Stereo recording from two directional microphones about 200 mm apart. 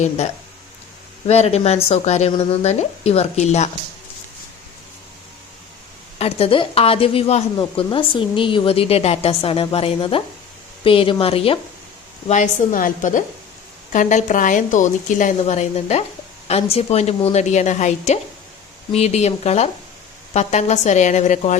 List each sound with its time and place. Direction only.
1.3 s speech: 30° left (ahead or behind)
6.1 s a woman's voice: 30° left (ahead or behind)
12.3 s speech: 40° left (ahead or behind)